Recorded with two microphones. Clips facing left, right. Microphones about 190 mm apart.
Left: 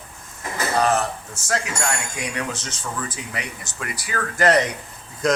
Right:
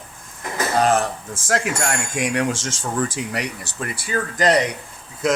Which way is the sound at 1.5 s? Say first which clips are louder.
Right 3 dB; 50° right (ahead or behind).